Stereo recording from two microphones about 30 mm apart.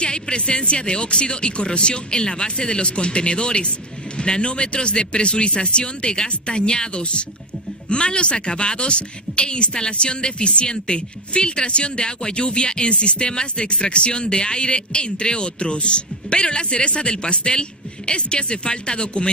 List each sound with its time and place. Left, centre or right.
0.0 s a woman's voice: left